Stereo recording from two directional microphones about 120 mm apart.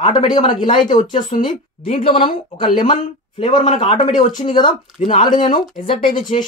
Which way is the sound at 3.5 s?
90° left.